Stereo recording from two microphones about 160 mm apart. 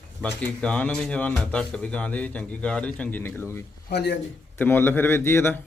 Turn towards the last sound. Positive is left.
turn(degrees=15)  # may be behind; listen again after turning